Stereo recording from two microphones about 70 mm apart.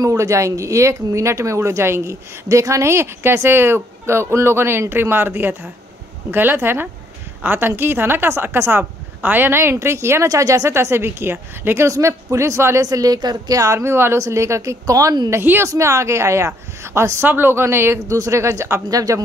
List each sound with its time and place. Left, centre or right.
0.0 s speech: right
2.4 s speech: right
9.6 s speech: right
10.2 s speech: right
11.9 s speech: right
12.8 s a woman's voice: right
13.6 s speech: right
17.2 s speech: right
18.0 s speech: right